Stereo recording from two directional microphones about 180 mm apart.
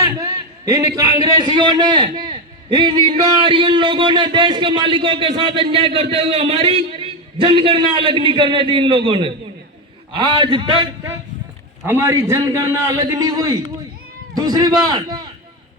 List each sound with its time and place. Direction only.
0.0 s a man's voice: 20° right (ahead or behind)
11.9 s a man's voice: 15° right (ahead or behind)